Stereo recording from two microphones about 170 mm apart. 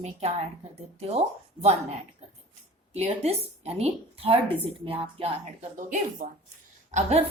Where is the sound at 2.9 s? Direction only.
40° right (ahead or behind).